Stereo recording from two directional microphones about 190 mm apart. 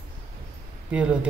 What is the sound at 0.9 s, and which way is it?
Speech, 5° right (ahead or behind).